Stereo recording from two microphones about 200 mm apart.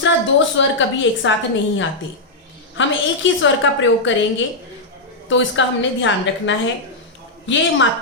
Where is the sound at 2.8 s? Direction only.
65° left (ahead or behind).